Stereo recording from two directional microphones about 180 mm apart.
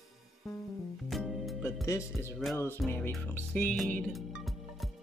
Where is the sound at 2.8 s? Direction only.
Centre (ahead or behind).